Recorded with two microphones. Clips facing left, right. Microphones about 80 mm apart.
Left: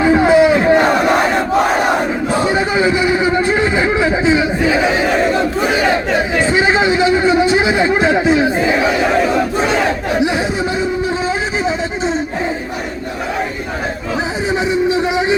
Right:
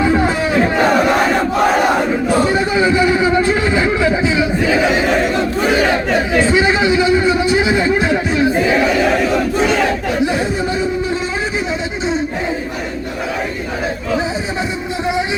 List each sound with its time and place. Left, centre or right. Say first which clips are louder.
0.0 s battle cry: left 5 dB; centre
2.7 s vehicle: right 2 dB; centre
3.7 s chatter: even; centre
6.4 s chatter: left 2 dB; left
14.8 s a sound: left 4 dB; centre